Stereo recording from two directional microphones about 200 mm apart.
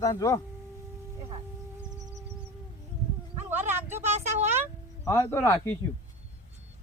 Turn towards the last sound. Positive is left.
turn(degrees=10)  # may be behind; listen again after turning